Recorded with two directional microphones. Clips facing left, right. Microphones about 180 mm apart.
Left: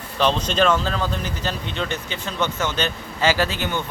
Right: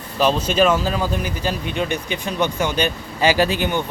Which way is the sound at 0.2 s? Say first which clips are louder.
Right 3 dB; 5° right (ahead or behind).